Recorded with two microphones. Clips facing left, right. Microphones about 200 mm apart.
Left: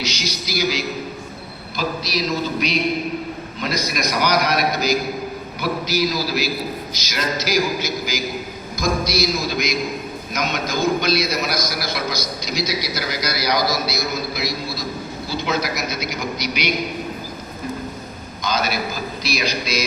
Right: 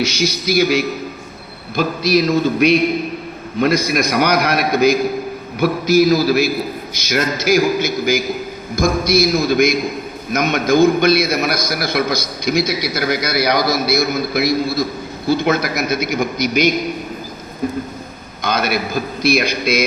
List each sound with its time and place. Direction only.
0.0 s a man's voice: 55° right (ahead or behind)
18.4 s a man's voice: 60° right (ahead or behind)